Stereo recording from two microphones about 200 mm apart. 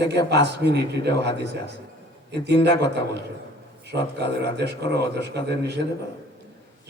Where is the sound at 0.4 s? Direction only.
60° right (ahead or behind).